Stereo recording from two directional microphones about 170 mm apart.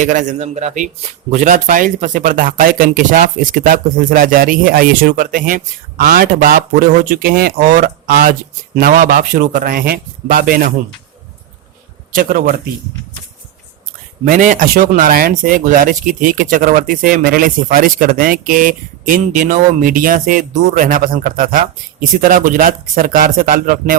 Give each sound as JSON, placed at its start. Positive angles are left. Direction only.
{"t": 0.0, "sound": "speech", "side_deg": -50}
{"t": 12.1, "sound": "speech", "side_deg": -60}
{"t": 14.3, "sound": "speech", "side_deg": -45}